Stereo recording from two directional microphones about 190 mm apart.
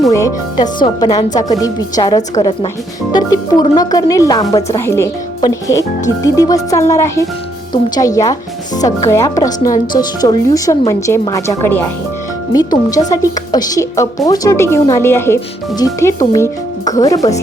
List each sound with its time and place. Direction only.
0.0 s speech: 15° left (ahead or behind)
6.2 s speech: 20° left (ahead or behind)